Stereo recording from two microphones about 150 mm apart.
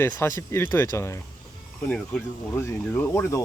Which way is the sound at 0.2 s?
15° left (ahead or behind).